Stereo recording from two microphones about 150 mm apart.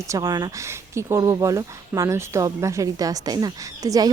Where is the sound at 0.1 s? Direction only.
25° right (ahead or behind).